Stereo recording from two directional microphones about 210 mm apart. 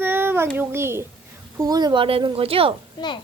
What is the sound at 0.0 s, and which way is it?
Child singing, 10° right (ahead or behind).